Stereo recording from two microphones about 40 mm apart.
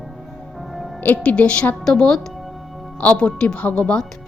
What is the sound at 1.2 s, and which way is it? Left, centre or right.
Speech, left.